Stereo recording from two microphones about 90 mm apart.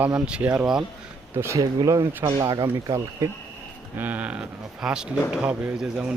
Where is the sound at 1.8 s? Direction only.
45° right (ahead or behind).